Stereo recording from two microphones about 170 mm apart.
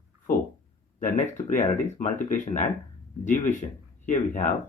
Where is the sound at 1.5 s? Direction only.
45° left (ahead or behind).